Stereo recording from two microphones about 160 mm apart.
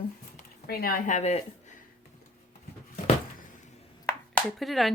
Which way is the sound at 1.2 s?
45° left (ahead or behind).